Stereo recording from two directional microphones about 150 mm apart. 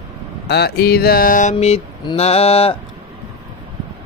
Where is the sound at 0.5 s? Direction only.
90° left; by 1.8 s 45° left (ahead or behind).